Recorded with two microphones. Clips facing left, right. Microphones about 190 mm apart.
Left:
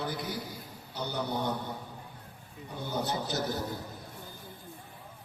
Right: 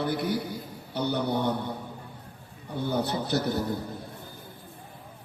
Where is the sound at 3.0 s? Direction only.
65° right (ahead or behind).